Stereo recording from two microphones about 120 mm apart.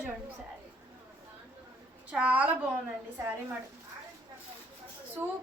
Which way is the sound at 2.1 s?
10° right (ahead or behind).